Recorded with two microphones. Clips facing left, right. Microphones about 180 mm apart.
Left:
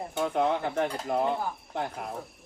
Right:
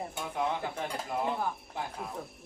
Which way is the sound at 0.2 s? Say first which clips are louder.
Left 7 dB; 70° left (ahead or behind).